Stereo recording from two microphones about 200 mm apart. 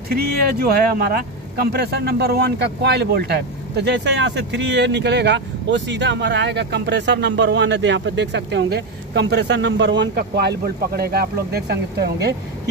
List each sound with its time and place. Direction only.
0.1 s speech: 50° right (ahead or behind)